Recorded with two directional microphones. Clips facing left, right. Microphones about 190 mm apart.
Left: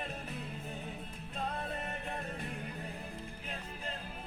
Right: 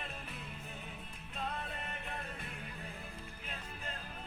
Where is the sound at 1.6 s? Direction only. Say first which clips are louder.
Left 5 dB; 40° left (ahead or behind).